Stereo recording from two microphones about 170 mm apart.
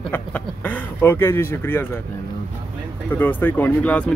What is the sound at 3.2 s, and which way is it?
Speech, 10° left (ahead or behind).